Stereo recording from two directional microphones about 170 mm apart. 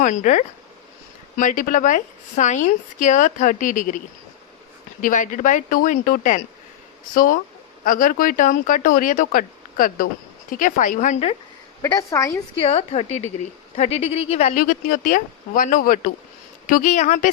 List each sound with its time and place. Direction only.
0.0 s speech: 45° left (ahead or behind)
11.8 s a woman's voice: 20° left (ahead or behind)
12.5 s a woman's voice: 35° left (ahead or behind)